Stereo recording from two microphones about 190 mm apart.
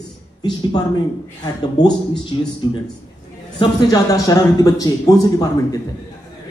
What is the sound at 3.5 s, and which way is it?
A man's voice, 20° left (ahead or behind).